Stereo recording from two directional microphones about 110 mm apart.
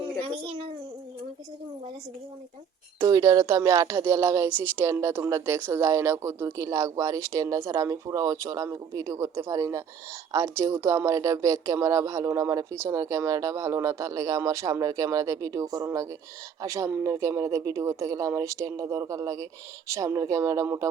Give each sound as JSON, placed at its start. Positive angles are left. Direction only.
{"t": 3.0, "sound": "speech", "side_deg": -30}